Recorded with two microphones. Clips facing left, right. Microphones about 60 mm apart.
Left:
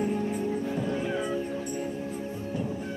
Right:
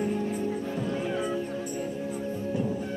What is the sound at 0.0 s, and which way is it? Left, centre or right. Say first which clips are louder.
Music: even; centre.